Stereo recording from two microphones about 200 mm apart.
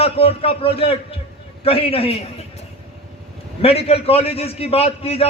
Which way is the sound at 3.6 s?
30° left (ahead or behind).